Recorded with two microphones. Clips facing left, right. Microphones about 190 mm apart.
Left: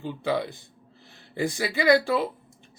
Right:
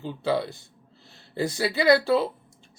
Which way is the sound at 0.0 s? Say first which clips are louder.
Right 1 dB; 15° left (ahead or behind).